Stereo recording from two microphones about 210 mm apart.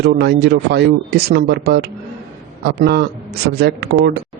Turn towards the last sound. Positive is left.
turn(degrees=-50)  # may be behind; listen again after turning